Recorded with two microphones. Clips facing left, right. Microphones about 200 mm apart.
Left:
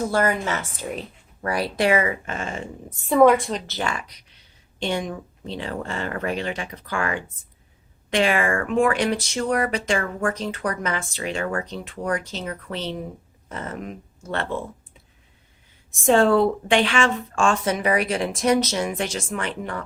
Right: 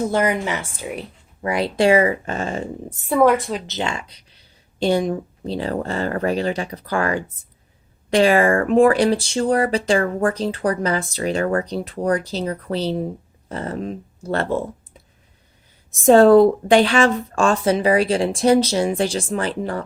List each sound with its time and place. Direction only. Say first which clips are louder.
0.0 s a woman's voice: right 2 dB; 20° right (ahead or behind)
1.4 s speech: right 4 dB; 20° right (ahead or behind)
3.0 s a woman's voice: left 1 dB; 5° right (ahead or behind)
3.7 s speech: right 2 dB; 25° right (ahead or behind)
15.9 s speech: right 7 dB; 40° right (ahead or behind)